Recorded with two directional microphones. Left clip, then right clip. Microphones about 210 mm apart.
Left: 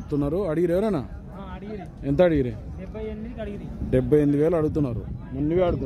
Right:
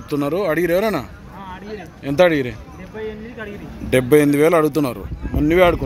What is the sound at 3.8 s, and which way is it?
Speech, 5° right (ahead or behind).